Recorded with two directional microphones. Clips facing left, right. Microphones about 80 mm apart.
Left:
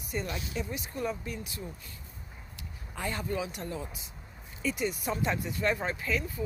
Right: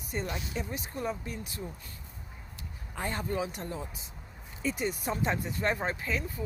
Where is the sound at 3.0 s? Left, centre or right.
Right.